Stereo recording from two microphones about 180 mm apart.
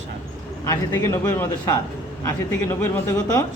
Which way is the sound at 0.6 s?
15° left (ahead or behind).